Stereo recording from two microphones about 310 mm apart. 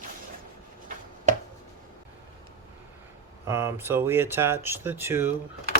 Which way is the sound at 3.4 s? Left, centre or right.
Centre.